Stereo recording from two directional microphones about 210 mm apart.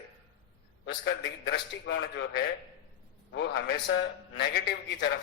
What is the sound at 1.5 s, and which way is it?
Speech, 55° left (ahead or behind).